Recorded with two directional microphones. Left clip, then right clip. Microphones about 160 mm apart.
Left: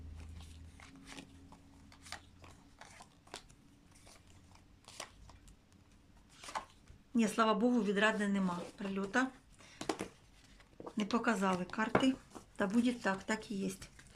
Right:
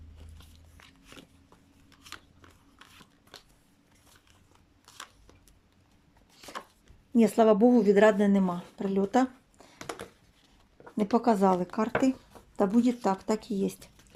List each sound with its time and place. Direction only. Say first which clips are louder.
3.3 s scissors: even; 5° left (ahead or behind)
7.2 s speech: right 10 dB; 35° right (ahead or behind)
9.7 s a sound: even; 5° left (ahead or behind)
11.0 s speech: right 10 dB; 30° right (ahead or behind)